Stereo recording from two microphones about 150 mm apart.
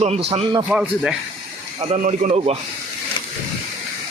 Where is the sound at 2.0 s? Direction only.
55° right (ahead or behind).